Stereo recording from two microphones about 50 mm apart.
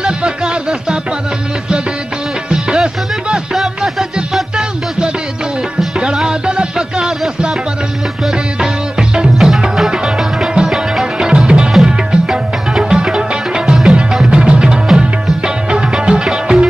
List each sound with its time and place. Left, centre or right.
0.0 s music: centre
2.5 s music: centre
3.5 s music: centre
5.9 s music: centre
9.1 s music: centre